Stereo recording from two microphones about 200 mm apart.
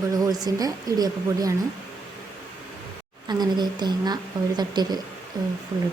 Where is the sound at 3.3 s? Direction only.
20° right (ahead or behind).